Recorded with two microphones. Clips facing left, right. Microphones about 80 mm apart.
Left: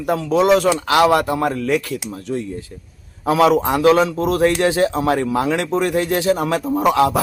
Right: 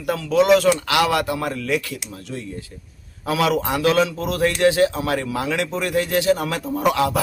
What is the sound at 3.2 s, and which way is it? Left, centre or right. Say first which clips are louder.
Speech: left 6 dB; left.